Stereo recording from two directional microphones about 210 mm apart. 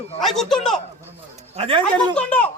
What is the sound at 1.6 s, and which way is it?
Speech, 25° right (ahead or behind).